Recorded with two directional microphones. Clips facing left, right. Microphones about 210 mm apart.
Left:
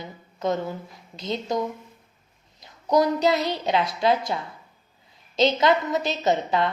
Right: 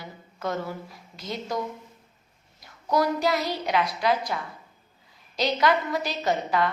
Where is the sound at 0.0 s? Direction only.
20° left (ahead or behind).